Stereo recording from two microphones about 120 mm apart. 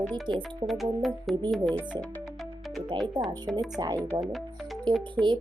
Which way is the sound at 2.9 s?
40° right (ahead or behind).